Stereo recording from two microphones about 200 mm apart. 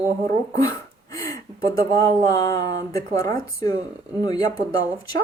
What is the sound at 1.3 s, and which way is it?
Speech, 15° left (ahead or behind).